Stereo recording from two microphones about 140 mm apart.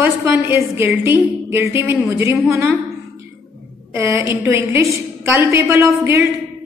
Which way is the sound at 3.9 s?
20° right (ahead or behind).